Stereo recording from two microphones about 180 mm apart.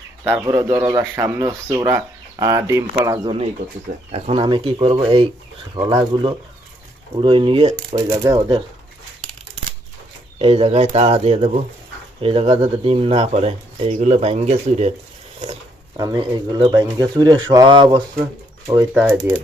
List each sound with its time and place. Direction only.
0.3 s speech: 15° right (ahead or behind)
3.9 s speech: 55° right (ahead or behind)
4.4 s speech: 25° right (ahead or behind)
10.3 s speech: 35° right (ahead or behind)
16.0 s speech: 20° right (ahead or behind)
18.9 s speech: 10° right (ahead or behind)